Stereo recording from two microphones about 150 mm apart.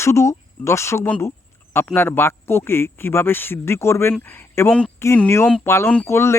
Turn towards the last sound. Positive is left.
turn(degrees=20)  # may be behind; listen again after turning